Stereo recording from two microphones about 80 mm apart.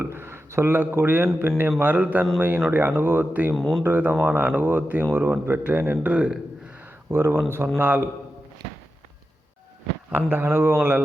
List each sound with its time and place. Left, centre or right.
0.0 s a sound: right
1.4 s speech: right
3.5 s speech: centre
3.8 s speech: right
6.7 s a sound: right
7.8 s speech: right
10.1 s speech: right